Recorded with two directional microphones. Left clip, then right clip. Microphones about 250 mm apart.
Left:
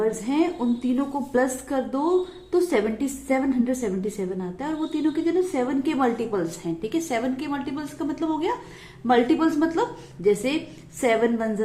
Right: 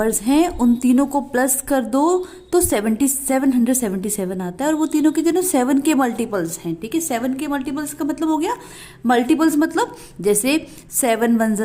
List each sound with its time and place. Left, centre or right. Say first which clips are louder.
0.0 s a woman's voice: right 6 dB; right